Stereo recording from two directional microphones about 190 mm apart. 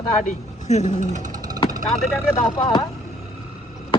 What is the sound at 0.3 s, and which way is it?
Speech, 35° left (ahead or behind).